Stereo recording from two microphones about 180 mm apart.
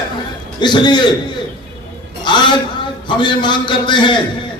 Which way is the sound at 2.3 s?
25° left (ahead or behind).